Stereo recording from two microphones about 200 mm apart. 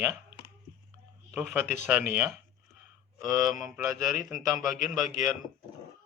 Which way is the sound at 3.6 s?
10° right (ahead or behind).